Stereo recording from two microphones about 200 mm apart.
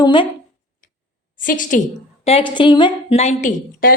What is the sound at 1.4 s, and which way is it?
Speech, 40° left (ahead or behind).